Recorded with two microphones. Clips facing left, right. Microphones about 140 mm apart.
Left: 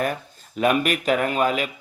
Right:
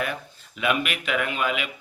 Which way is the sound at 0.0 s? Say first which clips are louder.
Left 4 dB; 40° left (ahead or behind).